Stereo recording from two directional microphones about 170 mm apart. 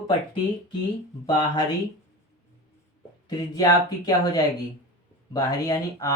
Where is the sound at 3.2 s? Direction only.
20° left (ahead or behind).